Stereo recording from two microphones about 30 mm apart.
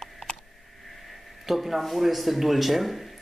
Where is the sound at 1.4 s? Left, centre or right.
Centre.